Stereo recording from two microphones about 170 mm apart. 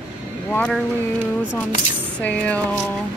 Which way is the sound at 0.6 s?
Centre (ahead or behind).